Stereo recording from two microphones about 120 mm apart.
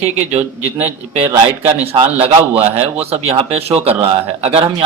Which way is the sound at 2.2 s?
55° right (ahead or behind).